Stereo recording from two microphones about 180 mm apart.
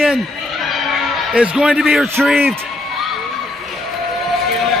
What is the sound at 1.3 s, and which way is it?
A man's voice, 5° right (ahead or behind).